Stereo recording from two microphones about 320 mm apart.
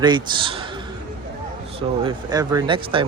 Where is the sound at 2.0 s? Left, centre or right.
Centre.